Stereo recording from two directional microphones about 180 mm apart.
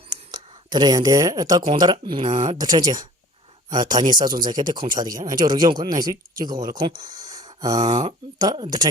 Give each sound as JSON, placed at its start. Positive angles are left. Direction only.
{"t": 0.3, "sound": "speech", "side_deg": -25}
{"t": 2.5, "sound": "speech", "side_deg": -20}
{"t": 7.0, "sound": "a sound", "side_deg": -20}
{"t": 7.9, "sound": "speech", "side_deg": -25}